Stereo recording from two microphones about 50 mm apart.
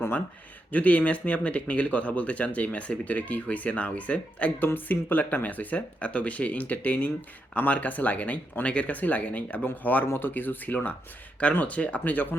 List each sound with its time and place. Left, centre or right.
0.7 s speech: left
4.6 s speech: left